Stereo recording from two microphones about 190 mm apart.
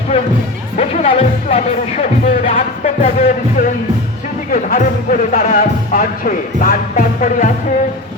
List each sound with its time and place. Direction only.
0.8 s music: 30° left (ahead or behind)
4.5 s speech: 45° left (ahead or behind)